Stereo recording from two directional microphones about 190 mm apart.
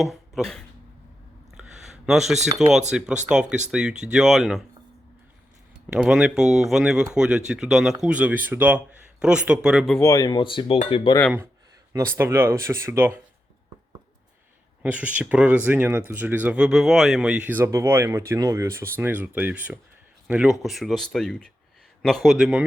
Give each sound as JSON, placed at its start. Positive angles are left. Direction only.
{"t": 0.0, "sound": "speech", "side_deg": 0}
{"t": 1.5, "sound": "a sound", "side_deg": 0}
{"t": 2.6, "sound": "speech", "side_deg": 0}
{"t": 5.9, "sound": "speech", "side_deg": -5}
{"t": 10.0, "sound": "speech", "side_deg": 20}
{"t": 11.9, "sound": "speech", "side_deg": -10}
{"t": 14.8, "sound": "speech", "side_deg": -10}